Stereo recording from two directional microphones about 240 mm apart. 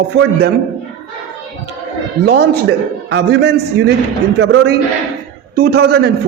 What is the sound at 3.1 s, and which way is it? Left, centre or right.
A man's voice, right.